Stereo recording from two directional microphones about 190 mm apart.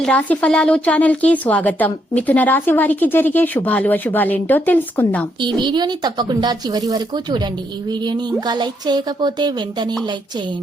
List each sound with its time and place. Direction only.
0.0 s a woman's voice: 5° left (ahead or behind)
5.4 s a woman's voice: 25° right (ahead or behind)